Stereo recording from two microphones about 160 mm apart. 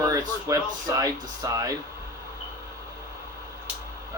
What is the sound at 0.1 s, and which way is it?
Speech, 20° right (ahead or behind).